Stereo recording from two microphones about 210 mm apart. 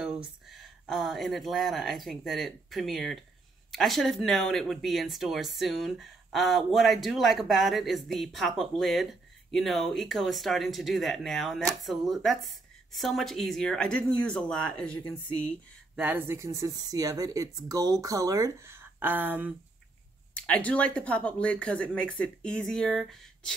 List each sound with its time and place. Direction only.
0.0 s speech: centre (ahead or behind)
16.0 s speech: 10° right (ahead or behind)
20.3 s speech: 5° left (ahead or behind)